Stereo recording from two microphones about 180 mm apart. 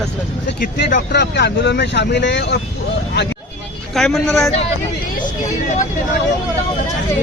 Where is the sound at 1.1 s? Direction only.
70° left (ahead or behind).